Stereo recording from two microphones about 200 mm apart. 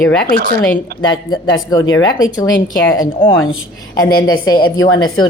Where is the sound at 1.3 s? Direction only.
20° left (ahead or behind).